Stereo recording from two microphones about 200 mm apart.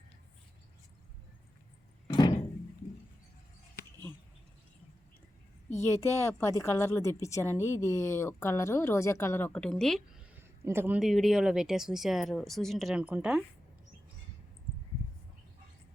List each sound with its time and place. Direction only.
2.1 s a sound: 20° left (ahead or behind)
5.8 s a woman's voice: 15° left (ahead or behind)
10.3 s speech: 10° right (ahead or behind)